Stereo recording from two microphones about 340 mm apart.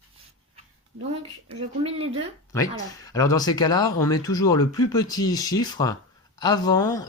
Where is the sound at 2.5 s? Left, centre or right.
Centre.